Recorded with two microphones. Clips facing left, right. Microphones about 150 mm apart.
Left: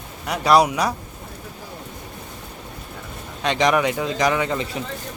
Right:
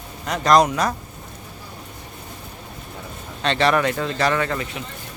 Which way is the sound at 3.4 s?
15° left (ahead or behind).